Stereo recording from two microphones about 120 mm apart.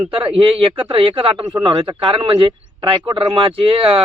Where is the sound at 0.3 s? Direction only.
50° right (ahead or behind).